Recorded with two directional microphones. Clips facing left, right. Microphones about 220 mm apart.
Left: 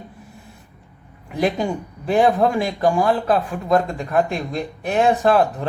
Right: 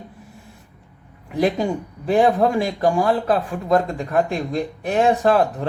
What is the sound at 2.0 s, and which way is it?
Speech, 45° right (ahead or behind).